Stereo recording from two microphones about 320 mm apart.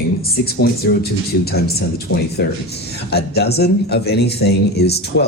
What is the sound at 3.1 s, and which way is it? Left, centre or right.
Speech, left.